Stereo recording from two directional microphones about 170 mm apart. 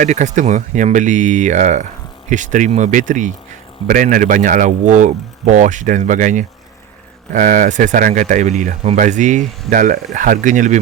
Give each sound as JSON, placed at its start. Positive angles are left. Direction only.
{"t": 0.0, "sound": "speech", "side_deg": -45}